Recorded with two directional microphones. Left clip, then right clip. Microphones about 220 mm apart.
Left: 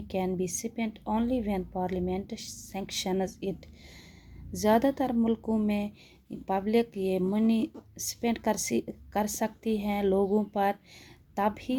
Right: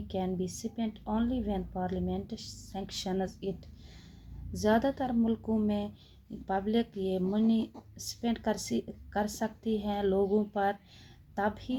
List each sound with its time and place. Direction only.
0.1 s speech: 35° left (ahead or behind)
4.5 s speech: 35° left (ahead or behind)